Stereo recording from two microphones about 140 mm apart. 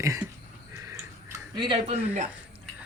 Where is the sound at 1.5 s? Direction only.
35° right (ahead or behind).